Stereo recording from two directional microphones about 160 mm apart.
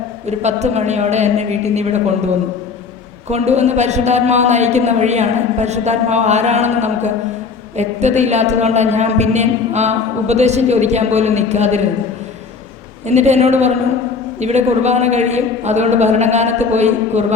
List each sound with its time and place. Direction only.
0.3 s a woman's voice: 45° right (ahead or behind)
13.1 s a woman's voice: 45° right (ahead or behind)